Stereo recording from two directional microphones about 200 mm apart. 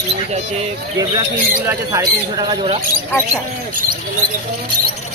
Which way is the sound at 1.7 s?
15° right (ahead or behind).